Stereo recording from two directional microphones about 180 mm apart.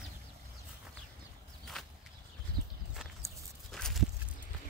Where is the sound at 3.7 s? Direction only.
Centre (ahead or behind).